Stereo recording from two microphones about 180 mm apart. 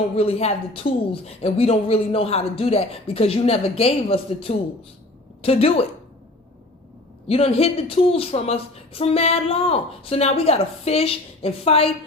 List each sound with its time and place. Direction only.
0.2 s a woman's voice: 35° left (ahead or behind)
7.3 s a woman's voice: 35° left (ahead or behind)